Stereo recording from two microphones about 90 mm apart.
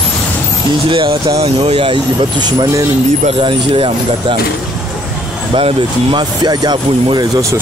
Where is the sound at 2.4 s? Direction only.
50° right (ahead or behind).